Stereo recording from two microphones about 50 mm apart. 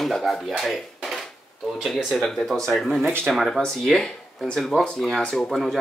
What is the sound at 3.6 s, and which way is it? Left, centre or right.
Speech, centre.